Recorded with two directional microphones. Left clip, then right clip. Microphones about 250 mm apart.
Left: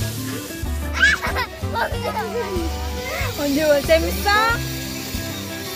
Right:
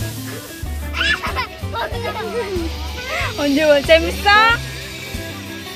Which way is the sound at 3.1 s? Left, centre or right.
Centre.